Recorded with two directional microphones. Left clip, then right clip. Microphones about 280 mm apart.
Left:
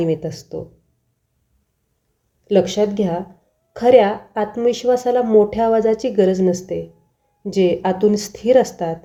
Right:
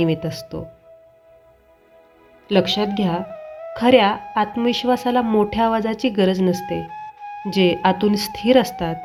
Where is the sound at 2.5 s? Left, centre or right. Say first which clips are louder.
Left 3 dB; right.